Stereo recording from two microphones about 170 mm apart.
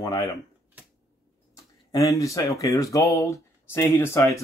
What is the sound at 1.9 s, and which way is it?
Speech, 20° left (ahead or behind).